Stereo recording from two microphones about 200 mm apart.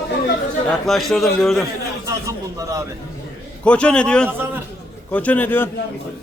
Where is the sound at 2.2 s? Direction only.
15° right (ahead or behind).